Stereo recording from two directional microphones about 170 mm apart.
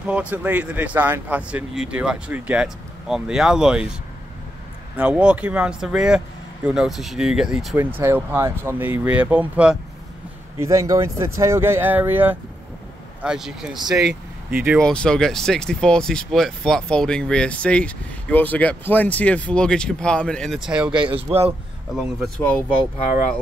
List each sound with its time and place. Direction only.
0.0 s speech: 5° right (ahead or behind)
4.9 s speech: 10° right (ahead or behind)
8.0 s speech: 15° right (ahead or behind)
10.6 s speech: 20° right (ahead or behind)
14.8 s speech: 5° left (ahead or behind)
20.9 s speech: 30° right (ahead or behind)
21.5 s speech: centre (ahead or behind)